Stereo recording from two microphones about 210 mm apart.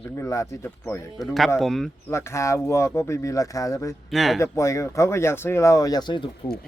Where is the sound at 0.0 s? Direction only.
15° left (ahead or behind).